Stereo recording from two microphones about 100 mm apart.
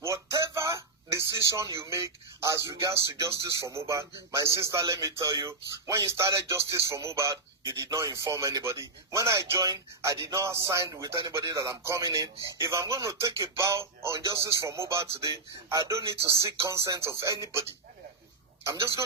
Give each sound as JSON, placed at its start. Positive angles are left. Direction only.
{"t": 0.0, "sound": "a sound", "side_deg": -30}
{"t": 1.8, "sound": "speech", "side_deg": -30}
{"t": 18.6, "sound": "a man's voice", "side_deg": -30}